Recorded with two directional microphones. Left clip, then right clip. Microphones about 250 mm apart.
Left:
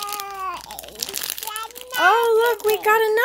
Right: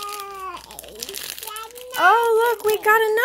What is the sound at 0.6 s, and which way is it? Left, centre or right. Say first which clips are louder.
Crumpling: left 4 dB; left.